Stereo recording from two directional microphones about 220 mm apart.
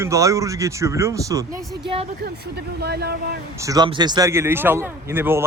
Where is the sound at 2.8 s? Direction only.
45° right (ahead or behind).